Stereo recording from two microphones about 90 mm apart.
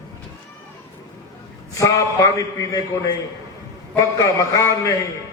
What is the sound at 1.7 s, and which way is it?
A man's voice, 35° left (ahead or behind).